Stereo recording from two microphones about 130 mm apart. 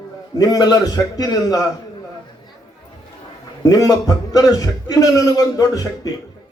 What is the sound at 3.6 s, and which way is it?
A man's voice, 25° left (ahead or behind).